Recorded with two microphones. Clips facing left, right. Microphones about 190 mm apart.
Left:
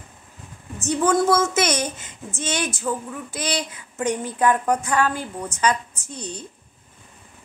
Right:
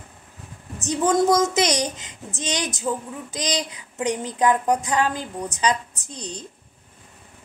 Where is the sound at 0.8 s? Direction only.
20° right (ahead or behind).